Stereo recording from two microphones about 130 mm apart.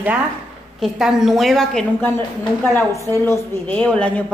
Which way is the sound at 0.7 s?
Centre (ahead or behind).